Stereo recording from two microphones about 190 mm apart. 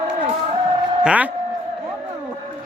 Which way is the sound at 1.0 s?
5° right (ahead or behind).